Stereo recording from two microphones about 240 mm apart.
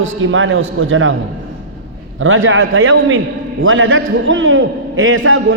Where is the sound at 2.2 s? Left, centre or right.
Right.